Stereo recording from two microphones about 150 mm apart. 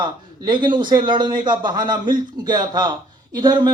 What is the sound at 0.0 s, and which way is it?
A man's voice, 30° right (ahead or behind).